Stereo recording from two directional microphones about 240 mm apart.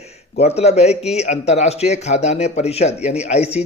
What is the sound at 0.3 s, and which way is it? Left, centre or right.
Speech, left.